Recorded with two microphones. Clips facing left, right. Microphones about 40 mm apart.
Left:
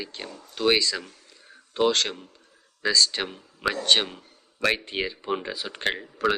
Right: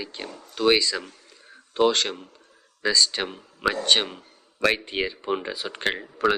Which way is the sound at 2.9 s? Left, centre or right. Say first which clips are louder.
Even; centre.